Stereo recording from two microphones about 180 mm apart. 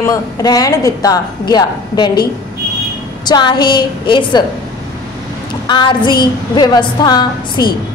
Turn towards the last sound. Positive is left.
turn(degrees=25)  # may be behind; listen again after turning